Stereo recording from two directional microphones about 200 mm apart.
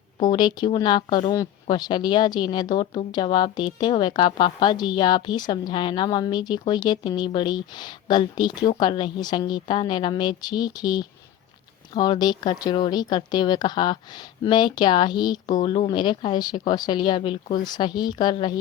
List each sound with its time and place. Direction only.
0.2 s a woman's voice: 20° left (ahead or behind)